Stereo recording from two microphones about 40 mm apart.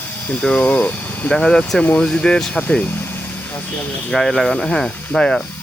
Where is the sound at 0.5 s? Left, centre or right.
Left.